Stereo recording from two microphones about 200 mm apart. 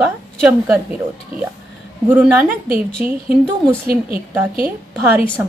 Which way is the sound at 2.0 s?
10° right (ahead or behind).